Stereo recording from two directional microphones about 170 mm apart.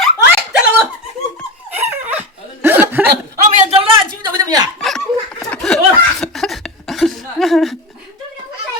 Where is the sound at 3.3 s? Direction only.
45° right (ahead or behind).